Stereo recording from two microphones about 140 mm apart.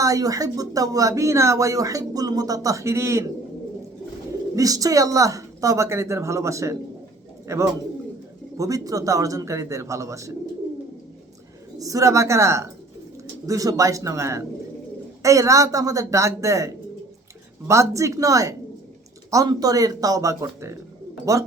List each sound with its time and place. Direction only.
0.0 s speech: 25° right (ahead or behind)
4.5 s speech: 25° right (ahead or behind)
11.8 s speech: 25° right (ahead or behind)